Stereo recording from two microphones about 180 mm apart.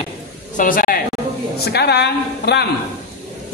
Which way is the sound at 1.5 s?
65° left (ahead or behind).